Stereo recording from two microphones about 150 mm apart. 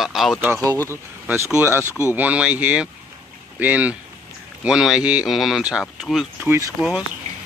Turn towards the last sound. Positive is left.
turn(degrees=-5)  # may be behind; listen again after turning